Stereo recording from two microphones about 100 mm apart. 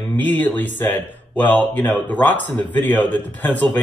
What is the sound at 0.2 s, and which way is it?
Speech, 15° left (ahead or behind).